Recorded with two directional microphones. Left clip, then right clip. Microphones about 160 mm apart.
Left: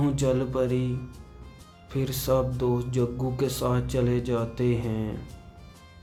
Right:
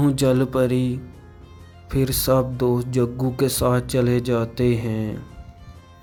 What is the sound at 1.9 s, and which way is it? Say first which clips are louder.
Mantra: right 6 dB; 35° right (ahead or behind).